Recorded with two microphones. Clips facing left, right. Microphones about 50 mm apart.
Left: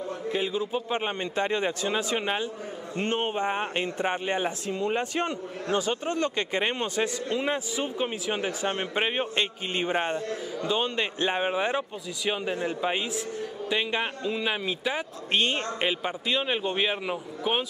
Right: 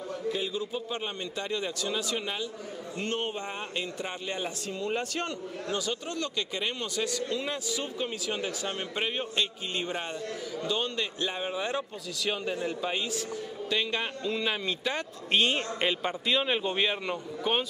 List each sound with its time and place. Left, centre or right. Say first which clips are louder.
0.3 s speech: left 4 dB; left
12.3 s a man's voice: left 3 dB; left